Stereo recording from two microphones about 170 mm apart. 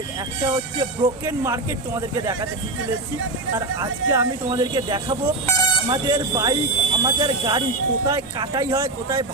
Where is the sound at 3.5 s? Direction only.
20° right (ahead or behind).